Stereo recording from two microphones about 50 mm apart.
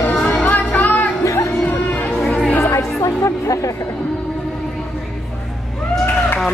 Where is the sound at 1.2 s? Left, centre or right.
Left.